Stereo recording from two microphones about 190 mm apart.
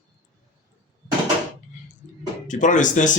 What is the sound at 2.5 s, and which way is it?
Speech, 40° left (ahead or behind).